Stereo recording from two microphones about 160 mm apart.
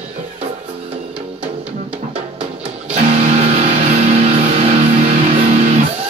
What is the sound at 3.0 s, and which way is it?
Music, 40° right (ahead or behind).